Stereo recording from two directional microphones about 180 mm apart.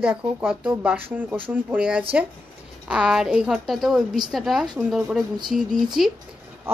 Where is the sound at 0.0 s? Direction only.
5° right (ahead or behind).